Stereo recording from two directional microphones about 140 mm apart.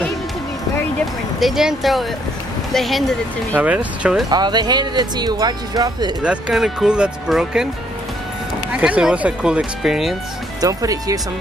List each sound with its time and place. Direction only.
1.4 s speech: 5° right (ahead or behind)
3.5 s speech: 10° right (ahead or behind)
4.3 s speech: 30° right (ahead or behind)
6.2 s speech: 5° right (ahead or behind)
8.7 s speech: 5° right (ahead or behind)
10.6 s speech: 25° right (ahead or behind)